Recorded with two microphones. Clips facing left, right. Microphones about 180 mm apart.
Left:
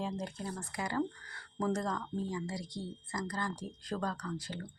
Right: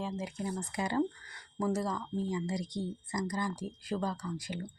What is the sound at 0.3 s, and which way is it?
Speech, 15° right (ahead or behind).